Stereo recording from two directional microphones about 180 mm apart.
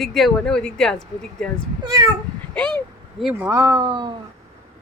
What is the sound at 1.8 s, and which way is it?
Speech, 20° right (ahead or behind).